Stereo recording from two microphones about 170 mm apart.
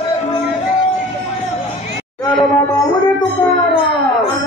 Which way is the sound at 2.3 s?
15° left (ahead or behind).